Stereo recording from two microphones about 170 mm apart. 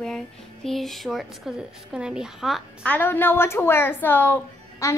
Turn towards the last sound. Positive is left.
turn(degrees=15)  # may be behind; listen again after turning